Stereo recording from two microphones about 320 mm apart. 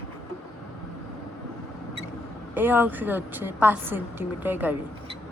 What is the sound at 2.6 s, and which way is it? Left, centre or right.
A woman's voice, centre.